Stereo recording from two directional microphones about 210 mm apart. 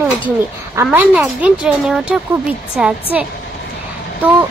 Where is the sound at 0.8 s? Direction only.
5° right (ahead or behind).